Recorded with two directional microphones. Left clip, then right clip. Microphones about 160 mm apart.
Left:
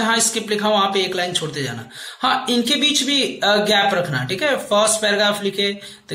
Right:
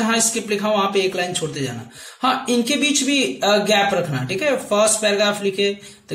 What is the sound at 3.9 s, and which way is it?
Speech, 20° right (ahead or behind).